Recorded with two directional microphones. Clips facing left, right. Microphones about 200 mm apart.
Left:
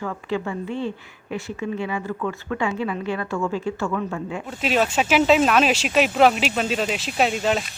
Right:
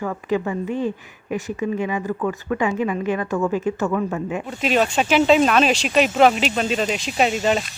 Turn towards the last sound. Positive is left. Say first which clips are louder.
# right 2 dB
turn(degrees=0)  # may be behind; listen again after turning